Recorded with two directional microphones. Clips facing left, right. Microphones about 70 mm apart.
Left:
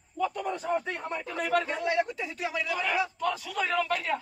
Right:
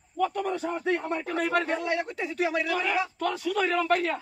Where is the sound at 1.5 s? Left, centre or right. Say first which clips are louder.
Left 2 dB; right.